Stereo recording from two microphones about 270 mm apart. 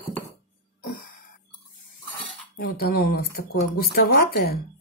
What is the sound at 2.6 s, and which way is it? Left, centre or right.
Speech, left.